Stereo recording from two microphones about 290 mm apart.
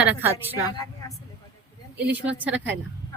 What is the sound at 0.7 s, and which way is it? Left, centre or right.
Speech, centre.